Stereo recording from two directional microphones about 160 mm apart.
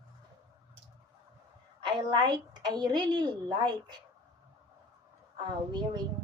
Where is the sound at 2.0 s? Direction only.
25° right (ahead or behind).